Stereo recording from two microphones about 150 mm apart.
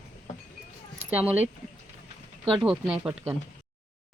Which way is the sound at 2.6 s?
5° right (ahead or behind).